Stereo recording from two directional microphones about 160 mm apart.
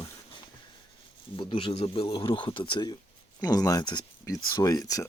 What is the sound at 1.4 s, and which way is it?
Speech, 30° left (ahead or behind).